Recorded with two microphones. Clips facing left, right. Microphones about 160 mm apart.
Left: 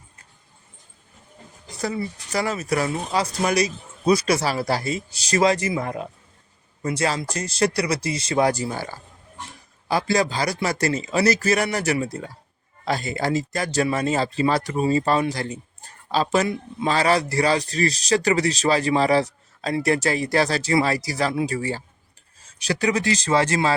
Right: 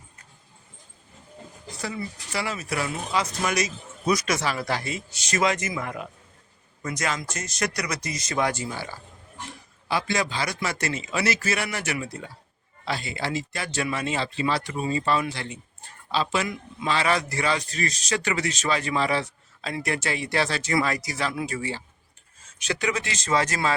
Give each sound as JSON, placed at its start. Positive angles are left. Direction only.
{"t": 1.8, "sound": "speech", "side_deg": 40}